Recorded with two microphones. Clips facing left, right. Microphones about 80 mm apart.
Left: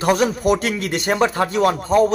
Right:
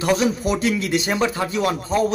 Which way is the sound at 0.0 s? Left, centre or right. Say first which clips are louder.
Left 2 dB; left.